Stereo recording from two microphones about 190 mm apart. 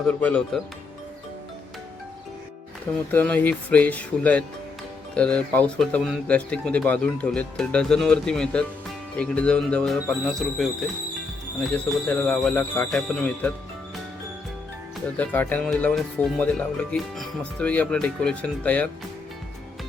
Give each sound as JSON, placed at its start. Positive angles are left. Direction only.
{"t": 0.1, "sound": "speech", "side_deg": 5}
{"t": 3.1, "sound": "speech", "side_deg": 10}
{"t": 15.2, "sound": "speech", "side_deg": 10}